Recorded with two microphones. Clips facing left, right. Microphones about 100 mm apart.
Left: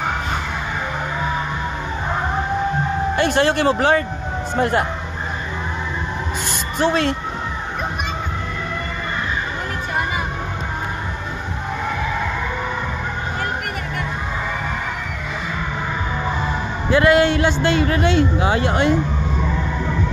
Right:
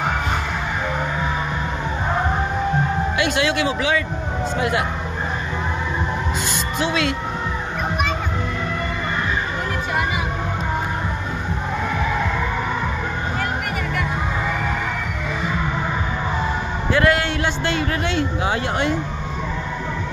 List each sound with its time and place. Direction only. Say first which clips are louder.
3.2 s speech: left 4 dB; 45° left (ahead or behind)
6.8 s speech: left 4 dB; 45° left (ahead or behind)
16.9 s speech: left 5 dB; 10° left (ahead or behind)